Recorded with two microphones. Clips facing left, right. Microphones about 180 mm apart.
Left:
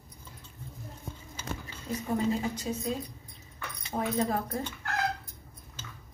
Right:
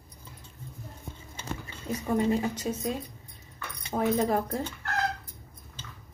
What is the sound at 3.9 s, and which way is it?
Speech, 80° right.